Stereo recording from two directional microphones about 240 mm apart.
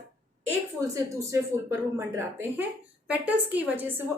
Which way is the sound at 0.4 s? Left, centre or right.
Centre.